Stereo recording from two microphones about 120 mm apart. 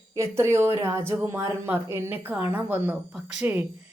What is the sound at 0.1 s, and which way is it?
Speech, 20° right (ahead or behind).